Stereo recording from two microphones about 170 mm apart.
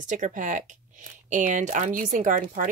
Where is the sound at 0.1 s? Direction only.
45° right (ahead or behind).